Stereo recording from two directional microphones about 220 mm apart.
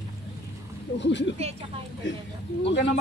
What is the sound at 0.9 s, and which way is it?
Speech, 55° left (ahead or behind).